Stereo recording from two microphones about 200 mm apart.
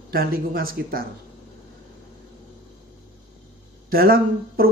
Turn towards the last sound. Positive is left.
turn(degrees=-50)  # may be behind; listen again after turning